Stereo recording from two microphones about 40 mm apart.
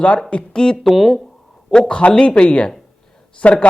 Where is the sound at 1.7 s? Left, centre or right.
Left.